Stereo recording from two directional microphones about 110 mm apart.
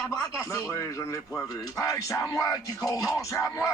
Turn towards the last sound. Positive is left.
turn(degrees=30)  # may be behind; listen again after turning